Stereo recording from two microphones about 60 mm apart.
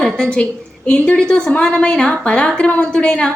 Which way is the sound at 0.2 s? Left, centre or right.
Centre.